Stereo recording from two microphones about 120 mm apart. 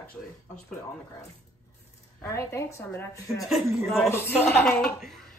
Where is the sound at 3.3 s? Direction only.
Centre (ahead or behind).